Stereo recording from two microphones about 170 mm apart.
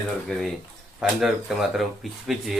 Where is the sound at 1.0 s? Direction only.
Centre (ahead or behind).